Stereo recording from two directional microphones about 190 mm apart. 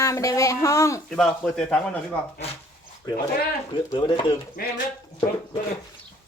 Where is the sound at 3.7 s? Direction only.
25° left (ahead or behind).